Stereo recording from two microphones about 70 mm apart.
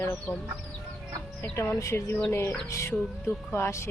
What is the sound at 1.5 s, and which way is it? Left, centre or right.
Speech, left.